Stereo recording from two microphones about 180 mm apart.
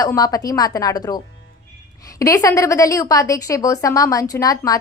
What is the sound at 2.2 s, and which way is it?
A woman's voice, 15° left (ahead or behind).